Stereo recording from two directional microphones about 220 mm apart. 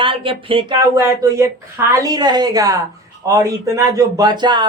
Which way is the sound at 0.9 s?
15° right (ahead or behind).